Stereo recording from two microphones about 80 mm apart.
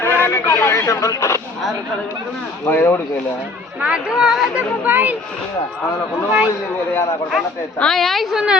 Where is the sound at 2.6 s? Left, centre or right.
Left.